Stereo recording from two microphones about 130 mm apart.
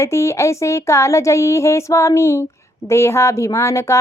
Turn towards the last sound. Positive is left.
turn(degrees=20)  # may be behind; listen again after turning